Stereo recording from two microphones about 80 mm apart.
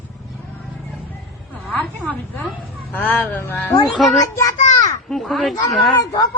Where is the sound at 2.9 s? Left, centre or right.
Left.